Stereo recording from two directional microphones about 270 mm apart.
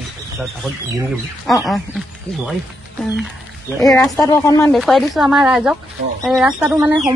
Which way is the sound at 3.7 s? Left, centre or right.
Centre.